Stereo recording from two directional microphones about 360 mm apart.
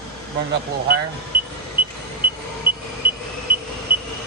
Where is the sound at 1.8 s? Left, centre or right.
Right.